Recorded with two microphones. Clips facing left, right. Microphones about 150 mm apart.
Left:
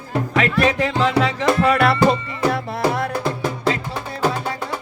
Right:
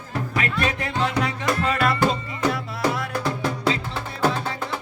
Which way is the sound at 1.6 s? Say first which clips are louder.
Left 6 dB; 75° left (ahead or behind).